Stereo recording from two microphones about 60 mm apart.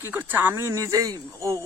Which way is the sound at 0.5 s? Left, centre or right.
Right.